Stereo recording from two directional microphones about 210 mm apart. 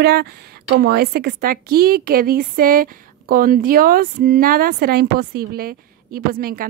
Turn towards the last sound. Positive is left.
turn(degrees=-45)  # may be behind; listen again after turning